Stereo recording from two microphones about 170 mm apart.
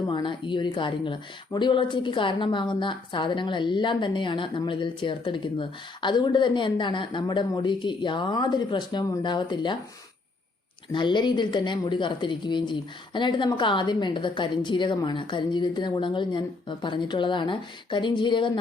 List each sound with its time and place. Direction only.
0.1 s speech: 30° left (ahead or behind)
10.9 s speech: 25° left (ahead or behind)